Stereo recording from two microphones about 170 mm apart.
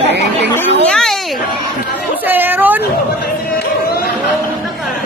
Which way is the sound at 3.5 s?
60° left (ahead or behind).